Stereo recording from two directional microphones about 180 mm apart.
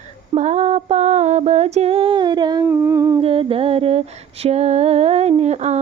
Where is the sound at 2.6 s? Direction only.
10° right (ahead or behind).